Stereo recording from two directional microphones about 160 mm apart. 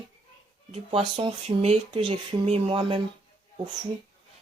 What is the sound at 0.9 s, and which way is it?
Speech, 35° right (ahead or behind).